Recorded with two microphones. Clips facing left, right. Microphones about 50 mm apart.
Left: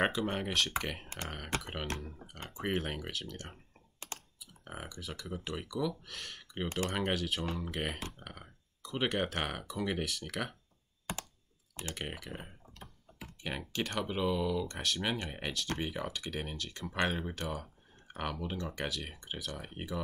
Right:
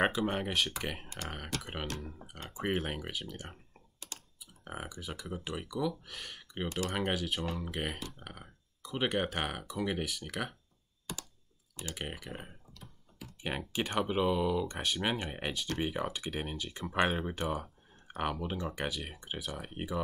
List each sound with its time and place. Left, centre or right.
0.0 s speech: centre
11.9 s speech: centre
13.4 s speech: centre